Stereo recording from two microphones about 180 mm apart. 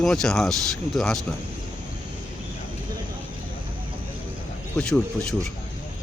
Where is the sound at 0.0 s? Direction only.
5° left (ahead or behind).